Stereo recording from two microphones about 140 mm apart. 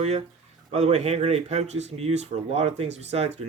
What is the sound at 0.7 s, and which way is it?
Speech, 50° right (ahead or behind).